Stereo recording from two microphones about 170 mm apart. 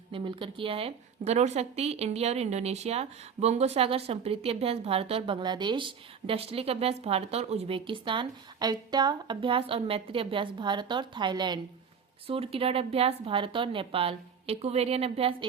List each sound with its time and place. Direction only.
0.1 s speech: 30° right (ahead or behind)